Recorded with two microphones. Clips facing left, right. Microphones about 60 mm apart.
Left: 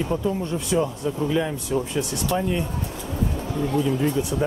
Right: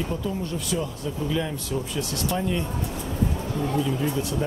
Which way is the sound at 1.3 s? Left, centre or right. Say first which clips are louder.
Left 3 dB; centre.